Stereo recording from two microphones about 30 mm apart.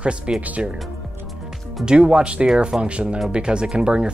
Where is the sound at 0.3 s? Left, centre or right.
Right.